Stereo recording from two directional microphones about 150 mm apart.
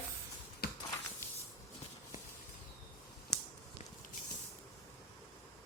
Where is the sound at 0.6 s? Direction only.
90° left.